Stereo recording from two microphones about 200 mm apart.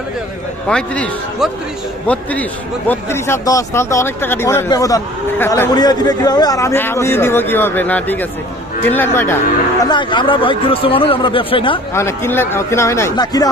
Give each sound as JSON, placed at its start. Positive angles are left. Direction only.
{"t": 0.7, "sound": "a man's voice", "side_deg": 5}
{"t": 9.9, "sound": "speech", "side_deg": 25}
{"t": 11.9, "sound": "a man's voice", "side_deg": 15}